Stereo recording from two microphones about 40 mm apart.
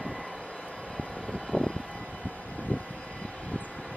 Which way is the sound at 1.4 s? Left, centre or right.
Centre.